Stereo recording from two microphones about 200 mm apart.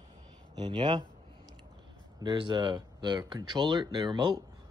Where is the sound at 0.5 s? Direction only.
25° right (ahead or behind).